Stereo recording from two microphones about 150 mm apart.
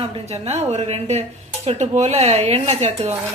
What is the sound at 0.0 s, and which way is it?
A woman's voice, 40° right (ahead or behind).